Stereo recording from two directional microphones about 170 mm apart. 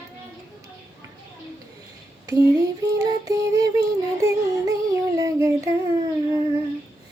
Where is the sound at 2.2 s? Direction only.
20° right (ahead or behind).